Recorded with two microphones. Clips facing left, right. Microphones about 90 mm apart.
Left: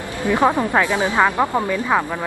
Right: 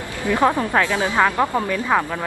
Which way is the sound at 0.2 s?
20° left (ahead or behind).